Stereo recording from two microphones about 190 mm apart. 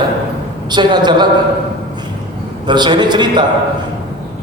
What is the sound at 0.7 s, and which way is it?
Speech, 25° right (ahead or behind).